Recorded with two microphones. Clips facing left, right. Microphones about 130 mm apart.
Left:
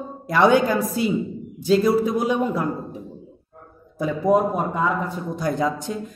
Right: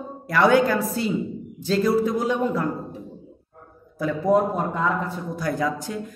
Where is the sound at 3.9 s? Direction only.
15° left (ahead or behind).